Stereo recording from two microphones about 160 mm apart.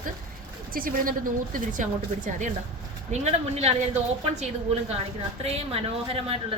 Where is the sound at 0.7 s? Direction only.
60° right (ahead or behind).